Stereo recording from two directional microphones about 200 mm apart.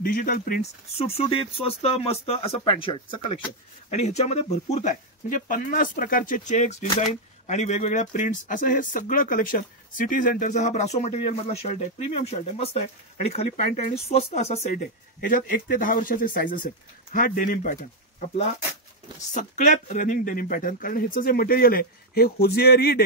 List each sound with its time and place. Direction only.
0.0 s speech: 45° left (ahead or behind)
0.9 s speech: 30° left (ahead or behind)
13.5 s speech: 40° left (ahead or behind)
19.3 s speech: 40° left (ahead or behind)